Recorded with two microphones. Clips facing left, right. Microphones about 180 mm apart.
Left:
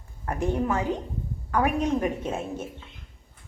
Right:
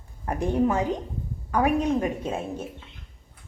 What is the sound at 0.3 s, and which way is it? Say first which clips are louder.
A woman's voice: right 3 dB; 15° right (ahead or behind).